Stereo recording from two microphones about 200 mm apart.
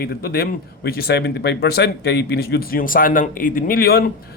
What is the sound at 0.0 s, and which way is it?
Speech, 50° left (ahead or behind).